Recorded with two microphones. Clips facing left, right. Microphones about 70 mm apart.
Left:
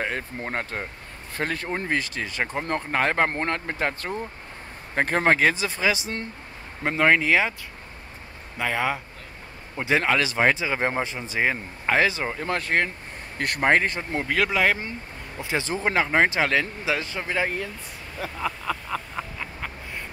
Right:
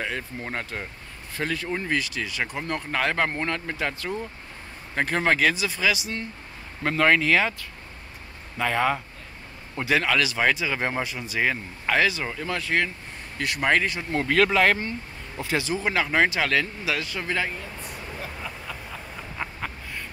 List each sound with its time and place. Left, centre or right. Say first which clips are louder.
0.0 s speech: left 2 dB; left
6.8 s speech: even; centre
8.5 s speech: right 2 dB; centre
9.8 s speech: left 1 dB; left
14.2 s speech: right 3 dB; centre
15.4 s speech: right 1 dB; left
15.7 s speech: left 3 dB; left
16.0 s speech: left 2 dB; left
18.4 s a sound: left 7 dB; left